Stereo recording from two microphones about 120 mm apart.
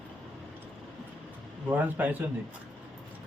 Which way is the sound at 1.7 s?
15° right (ahead or behind).